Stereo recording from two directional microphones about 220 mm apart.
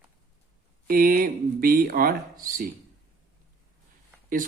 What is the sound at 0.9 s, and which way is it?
A man's voice, 40° right (ahead or behind).